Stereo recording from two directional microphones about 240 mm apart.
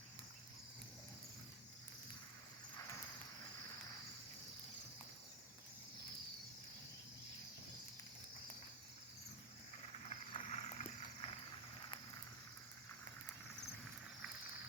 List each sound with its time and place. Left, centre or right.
10.1 s vehicle: left